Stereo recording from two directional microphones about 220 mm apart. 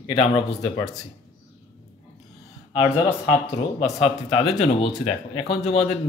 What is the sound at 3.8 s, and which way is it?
Speech, 25° left (ahead or behind).